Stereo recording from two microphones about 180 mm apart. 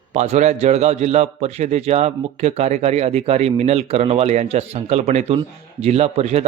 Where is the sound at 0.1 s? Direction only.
40° right (ahead or behind).